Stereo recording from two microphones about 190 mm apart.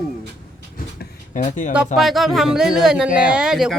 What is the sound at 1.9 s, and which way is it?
Speech, centre (ahead or behind).